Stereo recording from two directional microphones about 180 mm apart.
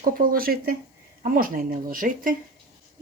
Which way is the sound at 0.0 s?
50° right (ahead or behind).